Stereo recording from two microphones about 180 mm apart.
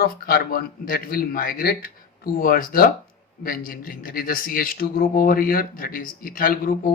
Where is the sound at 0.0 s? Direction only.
55° left (ahead or behind).